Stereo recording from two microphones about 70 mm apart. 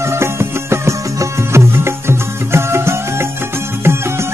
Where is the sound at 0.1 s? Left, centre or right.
Right.